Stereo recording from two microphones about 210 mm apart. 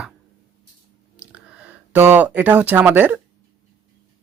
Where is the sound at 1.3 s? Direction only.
5° right (ahead or behind).